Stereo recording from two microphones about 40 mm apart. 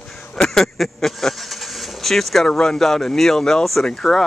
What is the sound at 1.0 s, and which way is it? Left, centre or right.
Vehicle, centre.